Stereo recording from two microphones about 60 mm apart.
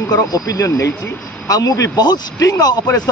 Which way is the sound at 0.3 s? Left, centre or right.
Left.